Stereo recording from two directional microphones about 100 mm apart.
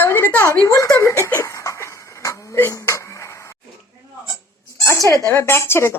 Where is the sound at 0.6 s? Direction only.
35° left (ahead or behind).